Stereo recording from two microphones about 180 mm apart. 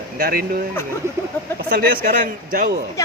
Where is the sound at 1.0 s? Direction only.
15° right (ahead or behind).